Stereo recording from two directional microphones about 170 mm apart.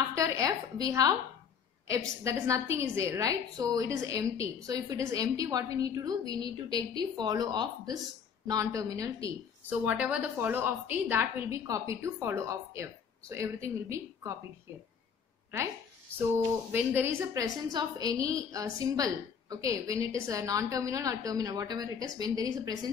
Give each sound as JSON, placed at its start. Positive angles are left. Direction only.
{"t": 0.1, "sound": "a sound", "side_deg": -20}
{"t": 1.9, "sound": "a woman's voice", "side_deg": -20}
{"t": 9.7, "sound": "a woman's voice", "side_deg": -10}
{"t": 16.7, "sound": "a woman's voice", "side_deg": -10}